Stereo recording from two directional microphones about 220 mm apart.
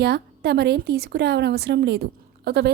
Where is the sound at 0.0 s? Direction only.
50° right (ahead or behind).